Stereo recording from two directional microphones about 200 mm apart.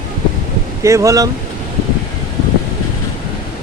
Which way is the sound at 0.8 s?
15° right (ahead or behind).